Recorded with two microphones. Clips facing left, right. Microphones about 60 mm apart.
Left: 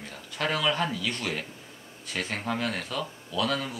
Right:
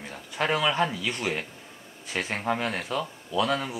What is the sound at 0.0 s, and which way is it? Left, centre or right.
Speech, centre.